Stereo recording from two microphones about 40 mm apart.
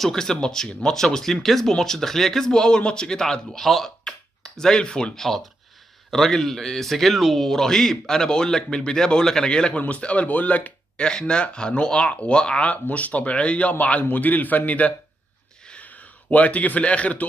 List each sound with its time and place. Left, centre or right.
0.0 s speech: centre
3.6 s speech: centre
4.6 s speech: centre
5.1 s a man's voice: centre
9.8 s speech: left
11.0 s speech: left
13.7 s a man's voice: left